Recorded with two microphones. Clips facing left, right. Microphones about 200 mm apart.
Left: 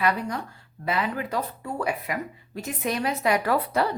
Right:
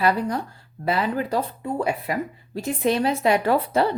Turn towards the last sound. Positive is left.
turn(degrees=-25)  # may be behind; listen again after turning